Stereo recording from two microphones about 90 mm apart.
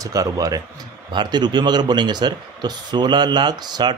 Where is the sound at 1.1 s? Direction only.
55° right (ahead or behind).